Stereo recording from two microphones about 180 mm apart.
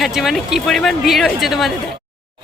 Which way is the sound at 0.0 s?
Centre (ahead or behind).